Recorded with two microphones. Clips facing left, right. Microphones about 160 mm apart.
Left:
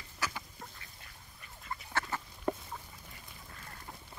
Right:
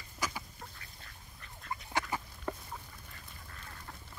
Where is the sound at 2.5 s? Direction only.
20° left (ahead or behind).